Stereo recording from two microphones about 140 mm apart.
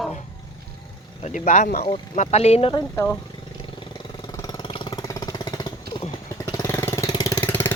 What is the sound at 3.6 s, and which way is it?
Vehicle, 35° left (ahead or behind).